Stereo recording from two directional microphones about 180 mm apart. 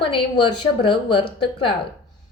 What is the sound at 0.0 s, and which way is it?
A woman's voice, 30° left (ahead or behind).